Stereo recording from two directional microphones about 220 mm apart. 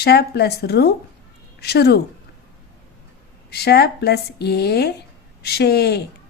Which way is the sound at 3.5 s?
45° left (ahead or behind).